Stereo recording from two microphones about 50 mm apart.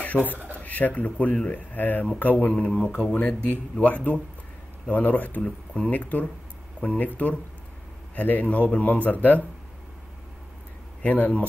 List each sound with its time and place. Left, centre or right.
0.1 s speech: centre
0.7 s speech: left
2.5 s speech: left
11.1 s speech: left